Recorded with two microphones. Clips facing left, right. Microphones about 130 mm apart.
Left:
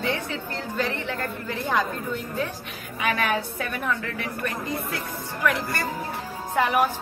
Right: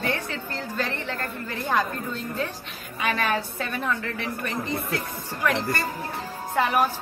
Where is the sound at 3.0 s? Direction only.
15° left (ahead or behind).